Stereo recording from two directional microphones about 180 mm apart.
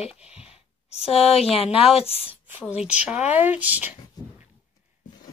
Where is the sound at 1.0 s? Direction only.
35° left (ahead or behind).